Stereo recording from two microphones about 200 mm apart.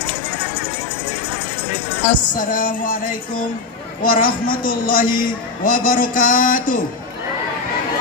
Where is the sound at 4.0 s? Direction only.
45° left (ahead or behind).